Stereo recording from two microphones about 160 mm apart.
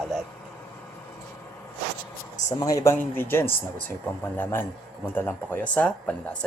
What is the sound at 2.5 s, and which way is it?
Speech, 20° left (ahead or behind).